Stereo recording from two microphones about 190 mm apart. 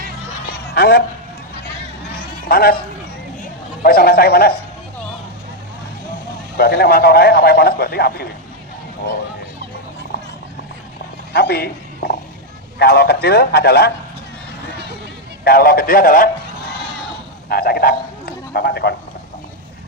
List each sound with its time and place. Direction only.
0.4 s bleat: 55° left (ahead or behind)
2.1 s a sound: 50° left (ahead or behind)
3.4 s speech: 50° left (ahead or behind)
6.6 s a man's voice: 55° left (ahead or behind)
11.3 s a woman's voice: 55° left (ahead or behind)
15.4 s a man's voice: 50° left (ahead or behind)
17.5 s speech: 50° left (ahead or behind)